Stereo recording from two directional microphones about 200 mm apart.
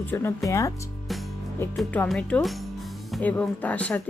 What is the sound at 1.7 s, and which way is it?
Speech, 5° left (ahead or behind).